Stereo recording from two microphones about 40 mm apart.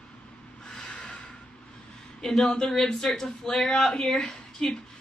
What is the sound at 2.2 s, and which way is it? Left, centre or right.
A woman's voice, centre.